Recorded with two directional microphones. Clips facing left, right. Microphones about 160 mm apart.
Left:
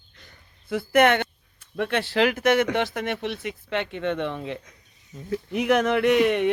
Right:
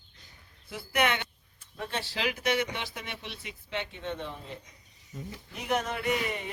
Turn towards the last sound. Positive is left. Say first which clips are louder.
# left 12 dB
turn(degrees=85)